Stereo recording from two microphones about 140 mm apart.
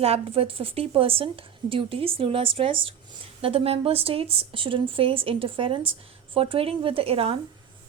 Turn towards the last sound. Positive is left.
turn(degrees=-45)  # may be behind; listen again after turning